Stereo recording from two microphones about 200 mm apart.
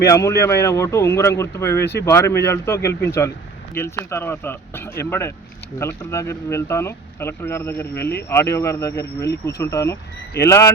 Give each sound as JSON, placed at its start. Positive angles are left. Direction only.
{"t": 0.0, "sound": "speech", "side_deg": 15}
{"t": 1.8, "sound": "speech", "side_deg": 55}
{"t": 2.0, "sound": "speech", "side_deg": 15}